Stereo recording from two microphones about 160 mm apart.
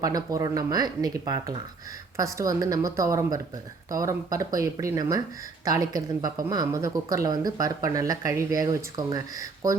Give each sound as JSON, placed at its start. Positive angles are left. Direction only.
{"t": 0.0, "sound": "speech", "side_deg": -20}